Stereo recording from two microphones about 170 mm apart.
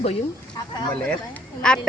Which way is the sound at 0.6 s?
25° left (ahead or behind).